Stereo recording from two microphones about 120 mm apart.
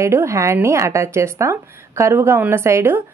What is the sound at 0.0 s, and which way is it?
A woman's voice, 25° right (ahead or behind).